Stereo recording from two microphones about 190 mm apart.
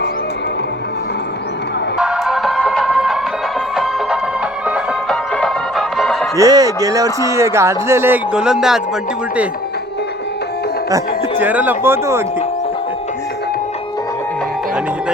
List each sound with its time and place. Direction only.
2.0 s music: 5° right (ahead or behind)
4.6 s music: 5° right (ahead or behind)
6.3 s speech: 20° right (ahead or behind); by 8.8 s 5° right (ahead or behind)
10.9 s speech: 10° right (ahead or behind)